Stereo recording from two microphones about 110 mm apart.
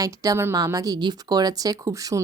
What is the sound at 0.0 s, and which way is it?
Speech, 30° right (ahead or behind).